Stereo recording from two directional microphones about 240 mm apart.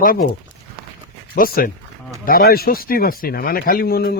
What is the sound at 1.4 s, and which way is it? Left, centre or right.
Speech, left.